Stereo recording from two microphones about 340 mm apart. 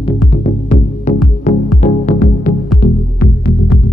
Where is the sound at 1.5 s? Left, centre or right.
Left.